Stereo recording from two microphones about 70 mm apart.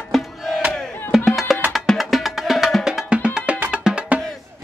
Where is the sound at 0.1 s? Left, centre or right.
Centre.